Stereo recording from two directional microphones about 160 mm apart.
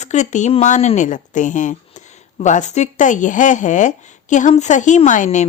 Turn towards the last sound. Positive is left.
turn(degrees=50)  # may be behind; listen again after turning